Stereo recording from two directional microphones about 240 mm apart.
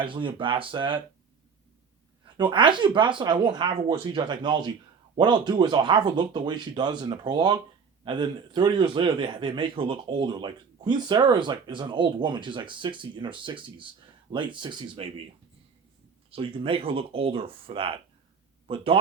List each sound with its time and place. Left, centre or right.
0.0 s a man's voice: right
2.2 s a man's voice: centre
16.3 s a man's voice: right